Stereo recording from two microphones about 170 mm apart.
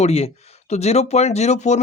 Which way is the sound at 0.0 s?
35° left (ahead or behind).